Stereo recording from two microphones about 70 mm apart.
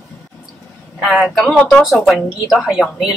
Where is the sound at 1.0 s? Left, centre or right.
Centre.